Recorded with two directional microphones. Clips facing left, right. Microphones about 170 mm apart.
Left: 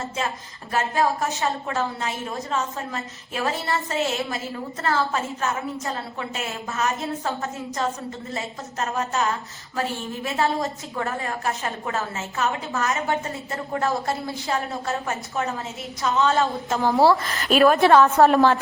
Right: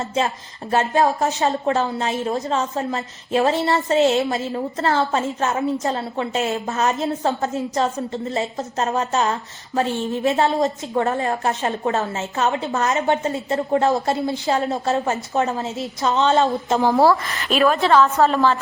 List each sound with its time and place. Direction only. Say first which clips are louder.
0.0 s a woman's voice: right 6 dB; 30° right (ahead or behind)
16.2 s a woman's voice: right 5 dB; 25° right (ahead or behind)
17.5 s a woman's voice: left 1 dB; 5° left (ahead or behind)
18.2 s a woman's voice: left 2 dB; 50° left (ahead or behind)